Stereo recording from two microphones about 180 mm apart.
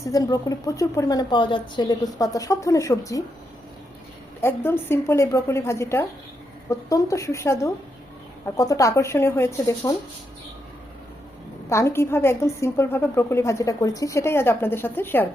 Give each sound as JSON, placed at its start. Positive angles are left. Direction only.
{"t": 0.0, "sound": "a woman's voice", "side_deg": 20}
{"t": 4.4, "sound": "a woman's voice", "side_deg": 15}
{"t": 11.7, "sound": "a woman's voice", "side_deg": 15}